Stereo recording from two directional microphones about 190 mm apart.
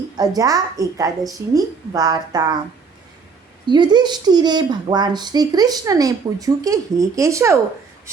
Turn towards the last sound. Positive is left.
turn(degrees=-15)  # may be behind; listen again after turning